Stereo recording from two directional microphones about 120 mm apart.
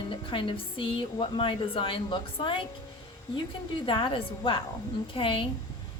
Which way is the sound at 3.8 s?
45° left (ahead or behind).